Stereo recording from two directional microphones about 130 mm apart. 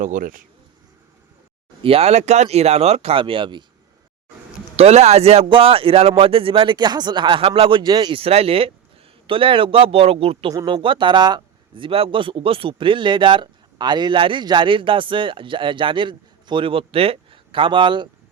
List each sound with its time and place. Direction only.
0.0 s speech: 90° right
1.8 s speech: 50° right (ahead or behind)
4.8 s speech: 55° right (ahead or behind); by 8.2 s 35° right (ahead or behind)
8.2 s speech: 50° right (ahead or behind)
10.7 s speech: 40° right (ahead or behind)